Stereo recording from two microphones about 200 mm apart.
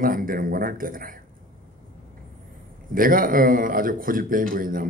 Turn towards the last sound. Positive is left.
turn(degrees=-45)  # may be behind; listen again after turning